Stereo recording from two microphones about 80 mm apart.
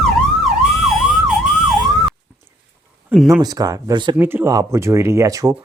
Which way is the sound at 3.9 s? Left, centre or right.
Right.